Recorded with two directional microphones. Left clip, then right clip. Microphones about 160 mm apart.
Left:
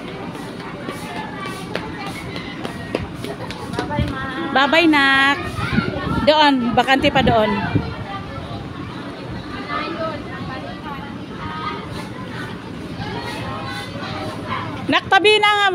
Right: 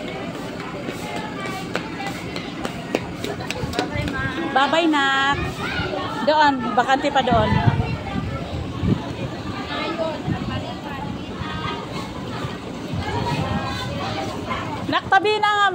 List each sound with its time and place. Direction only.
4.6 s speech: 35° left (ahead or behind)
14.9 s speech: 40° left (ahead or behind)